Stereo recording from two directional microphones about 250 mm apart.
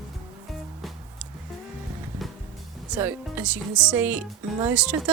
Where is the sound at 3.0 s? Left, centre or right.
Centre.